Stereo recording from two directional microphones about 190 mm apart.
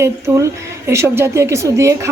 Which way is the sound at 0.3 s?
15° right (ahead or behind).